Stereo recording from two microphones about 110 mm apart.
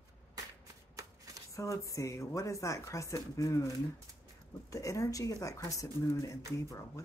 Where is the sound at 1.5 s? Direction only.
30° left (ahead or behind).